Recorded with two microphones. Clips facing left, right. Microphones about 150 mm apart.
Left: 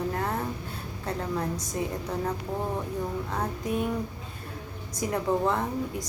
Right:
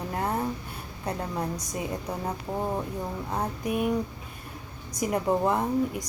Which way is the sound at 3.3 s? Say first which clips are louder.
Right 2 dB; 15° right (ahead or behind).